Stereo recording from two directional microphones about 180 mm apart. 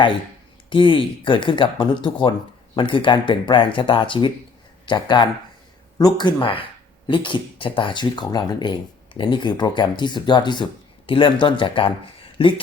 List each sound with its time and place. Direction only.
0.7 s speech: 30° left (ahead or behind)